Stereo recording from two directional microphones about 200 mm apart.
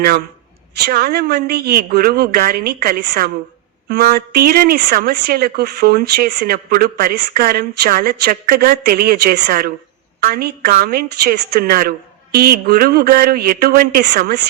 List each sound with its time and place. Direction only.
0.8 s speech: 50° right (ahead or behind)